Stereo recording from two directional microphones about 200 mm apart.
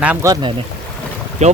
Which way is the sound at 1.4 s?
35° right (ahead or behind).